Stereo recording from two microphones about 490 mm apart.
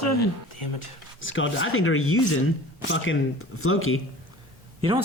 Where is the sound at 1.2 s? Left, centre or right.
Left.